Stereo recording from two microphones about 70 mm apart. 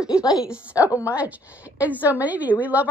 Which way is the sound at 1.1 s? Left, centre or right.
Right.